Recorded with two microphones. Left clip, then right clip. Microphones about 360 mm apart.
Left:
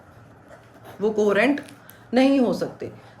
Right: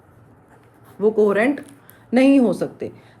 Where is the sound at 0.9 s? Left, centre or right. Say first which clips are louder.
Right 3 dB; centre.